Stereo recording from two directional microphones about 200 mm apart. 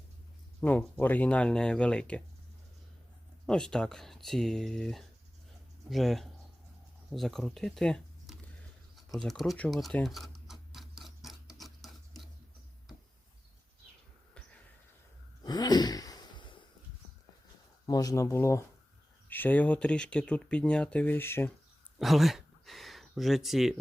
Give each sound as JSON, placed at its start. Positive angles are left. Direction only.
{"t": 0.6, "sound": "speech", "side_deg": 5}
{"t": 3.4, "sound": "speech", "side_deg": 5}
{"t": 9.1, "sound": "tick-tock", "side_deg": 0}
{"t": 11.6, "sound": "a sound", "side_deg": 0}
{"t": 15.4, "sound": "a sound", "side_deg": 20}
{"t": 17.8, "sound": "speech", "side_deg": 15}
{"t": 21.9, "sound": "speech", "side_deg": 0}